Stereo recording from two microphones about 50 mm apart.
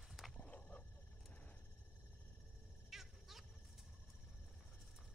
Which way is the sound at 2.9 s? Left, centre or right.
Centre.